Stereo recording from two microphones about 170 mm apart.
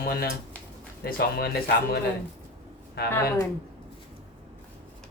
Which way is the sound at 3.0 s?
70° left (ahead or behind).